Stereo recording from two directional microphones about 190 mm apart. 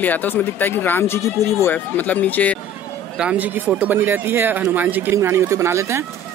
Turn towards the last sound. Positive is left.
turn(degrees=-15)  # may be behind; listen again after turning